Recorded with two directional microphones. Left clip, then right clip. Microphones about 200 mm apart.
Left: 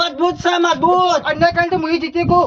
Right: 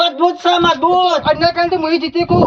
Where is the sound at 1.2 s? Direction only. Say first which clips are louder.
Right 2 dB; 10° left (ahead or behind).